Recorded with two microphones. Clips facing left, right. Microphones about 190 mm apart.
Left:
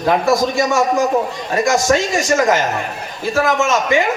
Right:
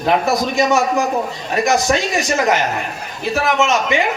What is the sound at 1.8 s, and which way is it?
Speech, 20° right (ahead or behind).